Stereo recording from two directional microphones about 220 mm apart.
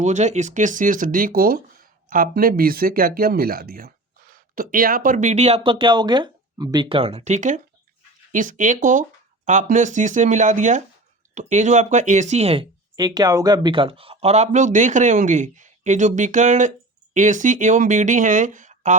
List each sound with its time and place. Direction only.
0.0 s speech: 30° right (ahead or behind)